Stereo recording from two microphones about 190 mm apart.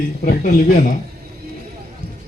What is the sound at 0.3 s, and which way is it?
Speech, 50° left (ahead or behind).